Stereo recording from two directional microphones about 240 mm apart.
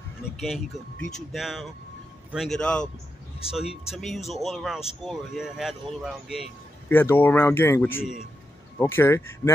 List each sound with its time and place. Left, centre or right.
0.4 s speech: centre